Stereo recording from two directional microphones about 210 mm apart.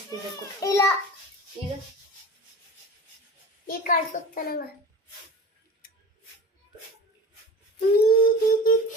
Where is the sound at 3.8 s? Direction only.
40° left (ahead or behind).